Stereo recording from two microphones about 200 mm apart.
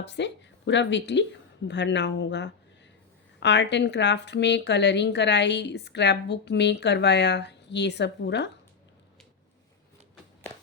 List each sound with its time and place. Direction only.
0.0 s a woman's voice: 60° left (ahead or behind)